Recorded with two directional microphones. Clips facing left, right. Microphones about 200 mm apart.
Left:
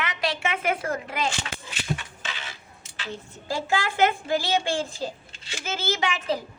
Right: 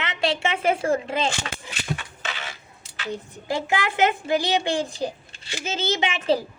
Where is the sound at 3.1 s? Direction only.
15° right (ahead or behind).